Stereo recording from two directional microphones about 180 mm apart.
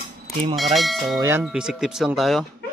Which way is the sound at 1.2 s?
15° right (ahead or behind).